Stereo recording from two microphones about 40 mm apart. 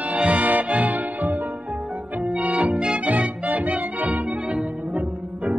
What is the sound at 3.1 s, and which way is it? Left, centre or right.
Music, right.